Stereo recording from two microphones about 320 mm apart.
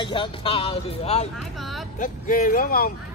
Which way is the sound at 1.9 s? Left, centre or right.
Left.